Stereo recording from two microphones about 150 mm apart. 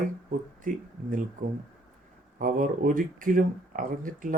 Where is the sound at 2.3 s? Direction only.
65° right (ahead or behind).